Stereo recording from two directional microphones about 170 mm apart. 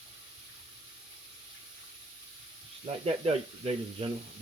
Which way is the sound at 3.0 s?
35° right (ahead or behind).